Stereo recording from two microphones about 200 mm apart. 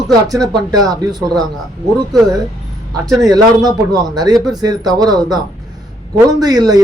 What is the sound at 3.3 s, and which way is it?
Speech, 20° right (ahead or behind).